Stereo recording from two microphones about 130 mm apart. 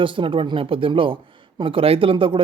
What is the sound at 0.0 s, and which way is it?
A man's voice, 40° right (ahead or behind).